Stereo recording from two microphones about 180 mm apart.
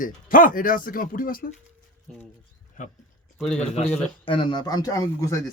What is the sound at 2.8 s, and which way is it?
Speech, 50° left (ahead or behind).